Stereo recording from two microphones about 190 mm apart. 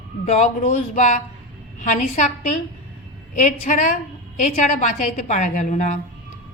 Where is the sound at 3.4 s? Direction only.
40° left (ahead or behind).